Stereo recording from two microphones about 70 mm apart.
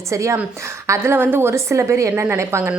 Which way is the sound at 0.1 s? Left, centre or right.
Right.